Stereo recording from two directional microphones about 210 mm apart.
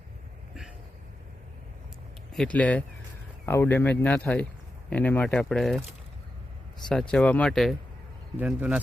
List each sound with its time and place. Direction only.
2.3 s speech: 5° left (ahead or behind)
6.8 s speech: 5° left (ahead or behind)